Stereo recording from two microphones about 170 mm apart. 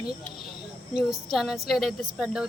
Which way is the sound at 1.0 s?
Centre (ahead or behind).